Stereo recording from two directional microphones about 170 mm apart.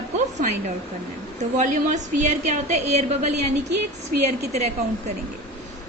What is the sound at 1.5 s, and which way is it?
A woman's voice, 50° right (ahead or behind).